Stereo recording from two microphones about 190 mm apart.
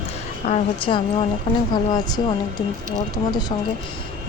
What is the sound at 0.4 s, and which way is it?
A woman's voice, 35° left (ahead or behind).